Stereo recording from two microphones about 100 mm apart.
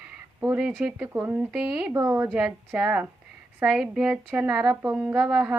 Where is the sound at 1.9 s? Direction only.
25° right (ahead or behind).